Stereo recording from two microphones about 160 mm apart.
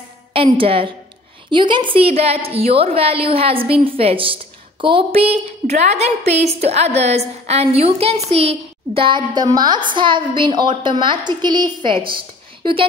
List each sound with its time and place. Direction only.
0.3 s a woman's voice: 35° right (ahead or behind)